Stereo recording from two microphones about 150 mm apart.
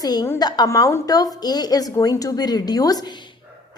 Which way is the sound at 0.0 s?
25° left (ahead or behind).